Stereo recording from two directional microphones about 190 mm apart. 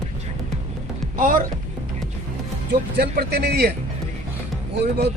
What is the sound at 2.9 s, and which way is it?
Speech, 55° right (ahead or behind).